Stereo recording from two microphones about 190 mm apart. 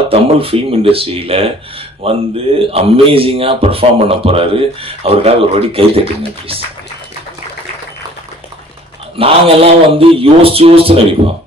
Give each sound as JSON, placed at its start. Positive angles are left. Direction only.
{"t": 0.1, "sound": "a man's voice", "side_deg": -30}
{"t": 9.2, "sound": "a man's voice", "side_deg": -30}